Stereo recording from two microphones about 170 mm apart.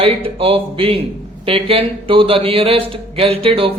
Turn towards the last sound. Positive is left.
turn(degrees=-35)  # may be behind; listen again after turning